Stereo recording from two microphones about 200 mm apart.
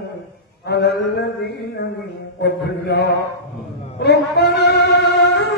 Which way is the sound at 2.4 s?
55° left (ahead or behind).